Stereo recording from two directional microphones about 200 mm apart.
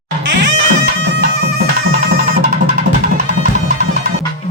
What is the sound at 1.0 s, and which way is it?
Bagpipes, 50° right (ahead or behind).